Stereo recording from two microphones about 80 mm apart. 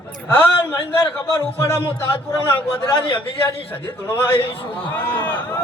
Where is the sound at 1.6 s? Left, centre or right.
Left.